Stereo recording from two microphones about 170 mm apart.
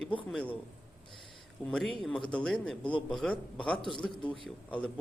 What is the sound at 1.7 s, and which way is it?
A man's voice, 5° left (ahead or behind).